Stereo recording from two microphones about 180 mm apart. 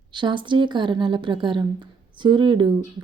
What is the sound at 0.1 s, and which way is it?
Speech, 25° right (ahead or behind).